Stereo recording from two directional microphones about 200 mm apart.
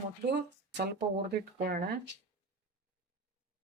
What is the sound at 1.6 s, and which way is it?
Speech, 45° right (ahead or behind).